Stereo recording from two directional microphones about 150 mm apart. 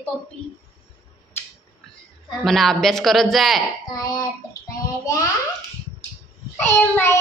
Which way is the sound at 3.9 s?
25° left (ahead or behind).